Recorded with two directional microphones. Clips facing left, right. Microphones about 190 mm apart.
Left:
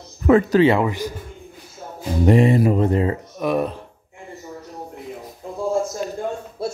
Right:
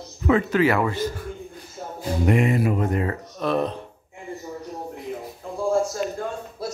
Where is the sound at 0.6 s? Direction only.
25° left (ahead or behind).